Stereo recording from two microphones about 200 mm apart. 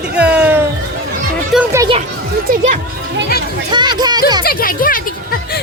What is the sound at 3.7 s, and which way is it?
Speech, 20° right (ahead or behind).